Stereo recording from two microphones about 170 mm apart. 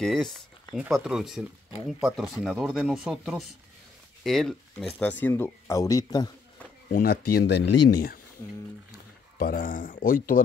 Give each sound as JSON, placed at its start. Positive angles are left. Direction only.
{"t": 0.0, "sound": "speech", "side_deg": 0}
{"t": 6.9, "sound": "speech", "side_deg": 60}
{"t": 9.4, "sound": "speech", "side_deg": 55}